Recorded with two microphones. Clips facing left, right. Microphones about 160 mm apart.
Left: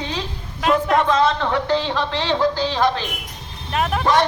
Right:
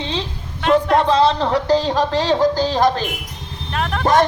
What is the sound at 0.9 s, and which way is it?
Music, 35° right (ahead or behind).